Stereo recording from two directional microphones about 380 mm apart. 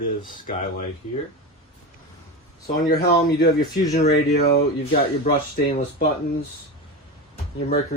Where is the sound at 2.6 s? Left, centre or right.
Left.